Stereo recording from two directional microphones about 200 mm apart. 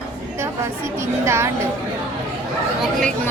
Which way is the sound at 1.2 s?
15° right (ahead or behind).